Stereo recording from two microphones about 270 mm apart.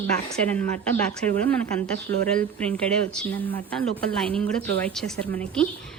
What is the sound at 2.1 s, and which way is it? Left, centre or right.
Speech, right.